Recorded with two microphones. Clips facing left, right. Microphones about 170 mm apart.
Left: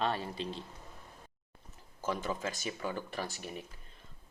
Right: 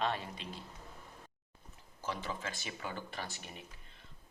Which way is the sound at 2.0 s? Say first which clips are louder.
Left 5 dB; 45° left (ahead or behind).